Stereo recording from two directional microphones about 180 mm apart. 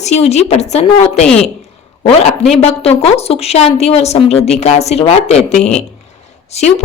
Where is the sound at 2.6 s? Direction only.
35° left (ahead or behind).